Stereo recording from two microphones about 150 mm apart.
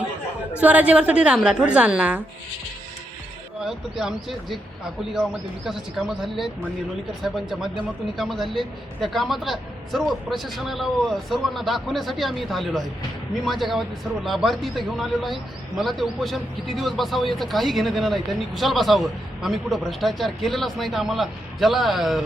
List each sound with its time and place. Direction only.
0.6 s a woman's voice: 10° right (ahead or behind)
3.6 s a man's voice: 5° right (ahead or behind)